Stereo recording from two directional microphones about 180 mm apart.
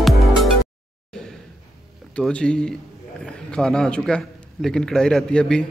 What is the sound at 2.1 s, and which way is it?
A man's voice, 5° left (ahead or behind).